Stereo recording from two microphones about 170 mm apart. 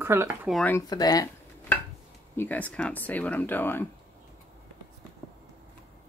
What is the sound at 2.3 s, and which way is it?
Speech, 10° left (ahead or behind).